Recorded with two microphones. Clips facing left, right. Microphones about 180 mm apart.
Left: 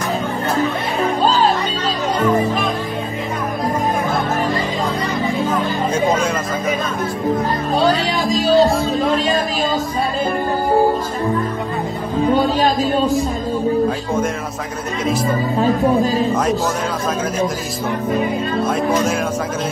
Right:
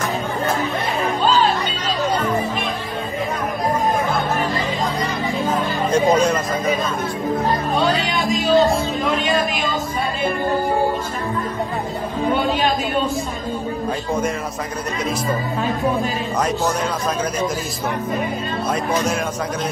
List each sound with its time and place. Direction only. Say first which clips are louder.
1.2 s music: left 1 dB; 40° left (ahead or behind)
7.7 s music: left 3 dB; 35° left (ahead or behind)
8.9 s a sound: left 3 dB; 35° left (ahead or behind)
12.4 s music: left 3 dB; 35° left (ahead or behind)
13.8 s music: left 3 dB; centre (ahead or behind)
15.6 s speech: left 7 dB; 35° left (ahead or behind)